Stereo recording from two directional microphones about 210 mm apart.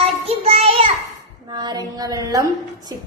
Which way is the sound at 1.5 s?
20° right (ahead or behind).